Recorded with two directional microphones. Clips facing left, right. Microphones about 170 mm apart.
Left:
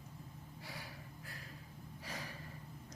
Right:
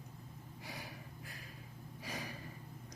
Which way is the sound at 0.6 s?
15° right (ahead or behind).